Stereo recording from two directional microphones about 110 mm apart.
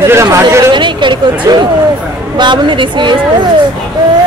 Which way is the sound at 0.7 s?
45° right (ahead or behind).